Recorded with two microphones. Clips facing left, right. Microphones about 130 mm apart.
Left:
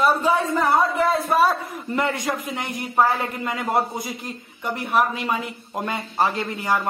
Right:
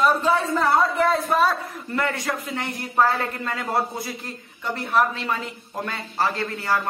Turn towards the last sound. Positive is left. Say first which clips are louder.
# left 1 dB
turn(degrees=15)  # may be behind; listen again after turning